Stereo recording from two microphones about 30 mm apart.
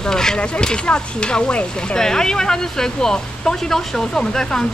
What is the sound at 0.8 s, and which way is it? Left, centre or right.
Speech, left.